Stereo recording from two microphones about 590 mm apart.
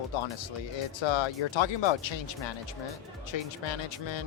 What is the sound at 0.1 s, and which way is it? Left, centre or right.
Speech, left.